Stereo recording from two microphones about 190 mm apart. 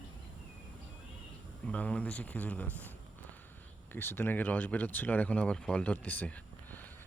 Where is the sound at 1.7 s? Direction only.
5° left (ahead or behind).